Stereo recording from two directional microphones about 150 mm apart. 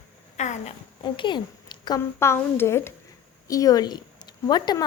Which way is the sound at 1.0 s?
30° left (ahead or behind).